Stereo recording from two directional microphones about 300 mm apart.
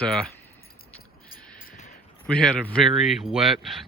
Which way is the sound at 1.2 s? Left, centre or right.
Left.